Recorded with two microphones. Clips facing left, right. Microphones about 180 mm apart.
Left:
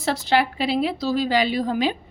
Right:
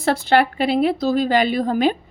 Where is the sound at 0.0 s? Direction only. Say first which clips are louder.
Right 4 dB; 55° right (ahead or behind).